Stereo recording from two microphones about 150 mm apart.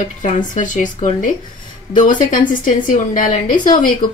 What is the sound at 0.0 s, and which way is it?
A woman's voice, 55° left (ahead or behind).